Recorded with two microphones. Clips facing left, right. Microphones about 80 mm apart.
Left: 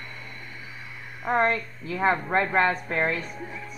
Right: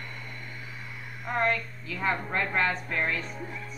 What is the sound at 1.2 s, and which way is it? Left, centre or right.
A woman's voice, left.